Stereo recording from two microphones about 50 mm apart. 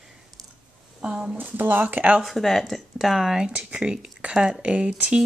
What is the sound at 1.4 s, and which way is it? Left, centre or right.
Speech, right.